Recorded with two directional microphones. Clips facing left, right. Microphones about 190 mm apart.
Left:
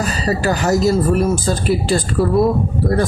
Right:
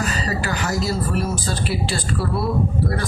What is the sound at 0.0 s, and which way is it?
Speech, 40° left (ahead or behind).